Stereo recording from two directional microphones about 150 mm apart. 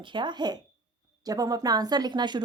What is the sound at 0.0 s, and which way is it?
Speech, 30° right (ahead or behind).